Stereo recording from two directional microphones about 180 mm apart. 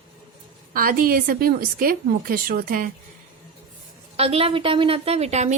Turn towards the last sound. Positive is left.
turn(degrees=-40)  # may be behind; listen again after turning